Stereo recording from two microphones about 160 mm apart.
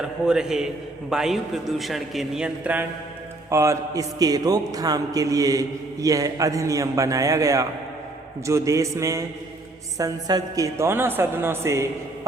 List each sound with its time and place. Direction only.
0.0 s a man's voice: 5° right (ahead or behind)
3.5 s a man's voice: 20° right (ahead or behind)